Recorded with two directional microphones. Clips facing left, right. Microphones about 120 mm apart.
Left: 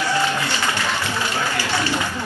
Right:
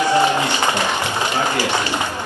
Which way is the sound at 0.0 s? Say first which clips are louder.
Right 5 dB; 20° right (ahead or behind).